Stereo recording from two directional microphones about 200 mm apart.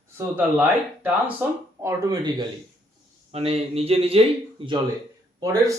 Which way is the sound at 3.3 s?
30° right (ahead or behind).